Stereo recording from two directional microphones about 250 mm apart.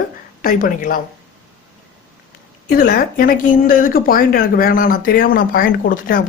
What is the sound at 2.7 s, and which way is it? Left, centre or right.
A woman's voice, left.